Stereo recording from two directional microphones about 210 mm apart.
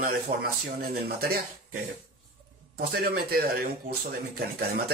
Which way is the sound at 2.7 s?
45° right (ahead or behind).